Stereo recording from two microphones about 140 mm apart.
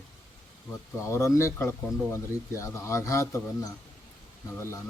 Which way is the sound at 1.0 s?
20° left (ahead or behind).